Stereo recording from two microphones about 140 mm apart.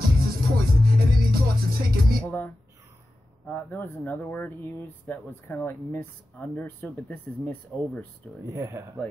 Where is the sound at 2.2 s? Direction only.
15° left (ahead or behind).